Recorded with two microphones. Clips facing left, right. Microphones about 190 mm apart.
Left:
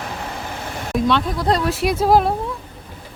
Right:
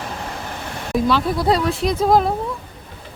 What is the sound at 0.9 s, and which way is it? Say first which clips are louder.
Speech: right 1 dB; centre (ahead or behind).